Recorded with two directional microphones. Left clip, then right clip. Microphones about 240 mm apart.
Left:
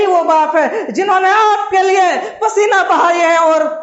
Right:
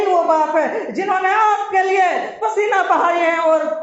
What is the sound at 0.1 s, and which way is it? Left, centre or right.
A man's voice, left.